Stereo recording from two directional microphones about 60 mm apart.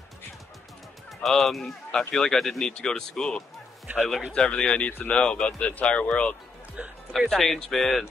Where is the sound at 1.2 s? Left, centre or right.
Centre; by 6.4 s left.